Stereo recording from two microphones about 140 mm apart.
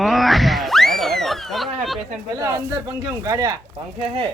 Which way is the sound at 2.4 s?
20° right (ahead or behind).